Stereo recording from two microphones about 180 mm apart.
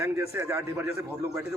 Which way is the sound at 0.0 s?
15° right (ahead or behind).